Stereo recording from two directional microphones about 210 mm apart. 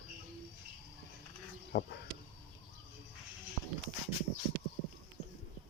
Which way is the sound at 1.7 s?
45° left (ahead or behind).